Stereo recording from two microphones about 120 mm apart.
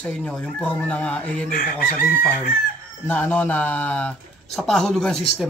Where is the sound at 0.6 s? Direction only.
15° left (ahead or behind).